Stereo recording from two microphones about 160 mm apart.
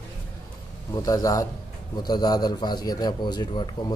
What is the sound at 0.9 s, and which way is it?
A man's voice, 20° left (ahead or behind).